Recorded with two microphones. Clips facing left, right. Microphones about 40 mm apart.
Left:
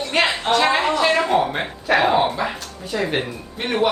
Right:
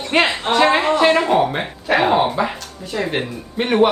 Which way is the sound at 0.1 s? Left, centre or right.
Centre.